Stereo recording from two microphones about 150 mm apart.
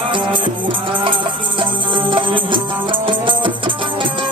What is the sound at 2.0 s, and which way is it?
Music, 35° right (ahead or behind).